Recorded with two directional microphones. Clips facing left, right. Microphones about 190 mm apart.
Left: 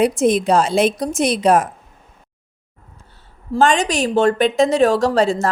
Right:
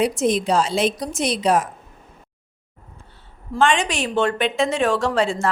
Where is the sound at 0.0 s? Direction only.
50° left (ahead or behind).